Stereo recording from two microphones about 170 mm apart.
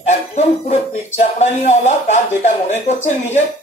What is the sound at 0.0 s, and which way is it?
Speech, 40° left (ahead or behind).